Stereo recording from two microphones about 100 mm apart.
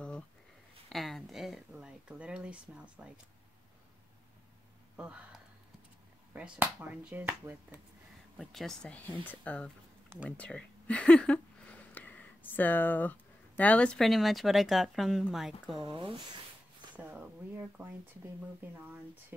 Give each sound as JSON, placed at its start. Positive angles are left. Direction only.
{"t": 0.8, "sound": "a sound", "side_deg": 0}
{"t": 4.9, "sound": "a sound", "side_deg": -10}
{"t": 6.3, "sound": "speech", "side_deg": -10}
{"t": 8.4, "sound": "a woman's voice", "side_deg": 0}
{"t": 8.9, "sound": "speech", "side_deg": 15}
{"t": 10.3, "sound": "a sound", "side_deg": 15}
{"t": 13.6, "sound": "a woman's voice", "side_deg": 15}
{"t": 15.8, "sound": "speech", "side_deg": -60}
{"t": 16.9, "sound": "speech", "side_deg": -15}